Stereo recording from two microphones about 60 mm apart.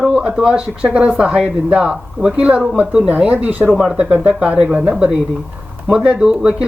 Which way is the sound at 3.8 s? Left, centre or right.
Centre.